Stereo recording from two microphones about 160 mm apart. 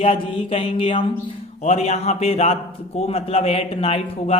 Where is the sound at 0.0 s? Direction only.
40° left (ahead or behind).